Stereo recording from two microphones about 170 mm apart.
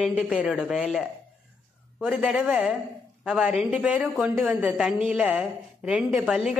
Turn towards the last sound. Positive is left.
turn(degrees=-5)  # may be behind; listen again after turning